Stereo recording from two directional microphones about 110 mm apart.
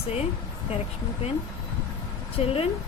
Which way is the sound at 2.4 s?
60° left (ahead or behind).